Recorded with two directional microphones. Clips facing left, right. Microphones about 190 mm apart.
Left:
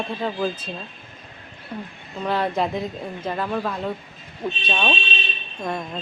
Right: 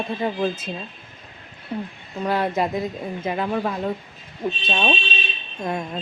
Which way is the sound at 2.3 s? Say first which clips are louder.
Right 1 dB; 5° right (ahead or behind).